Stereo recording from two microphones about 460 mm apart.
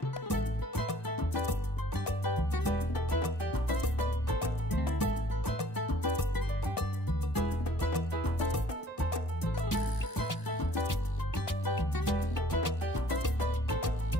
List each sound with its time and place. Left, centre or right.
0.3 s music: left